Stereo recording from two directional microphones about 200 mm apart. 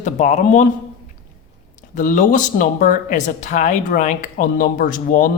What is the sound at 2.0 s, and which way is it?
Speech, 40° left (ahead or behind).